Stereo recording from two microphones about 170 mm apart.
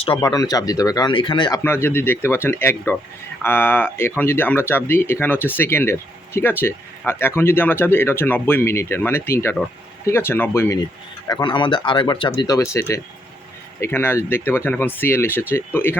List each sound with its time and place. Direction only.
0.2 s speech: 20° left (ahead or behind)
11.3 s speech: 25° left (ahead or behind)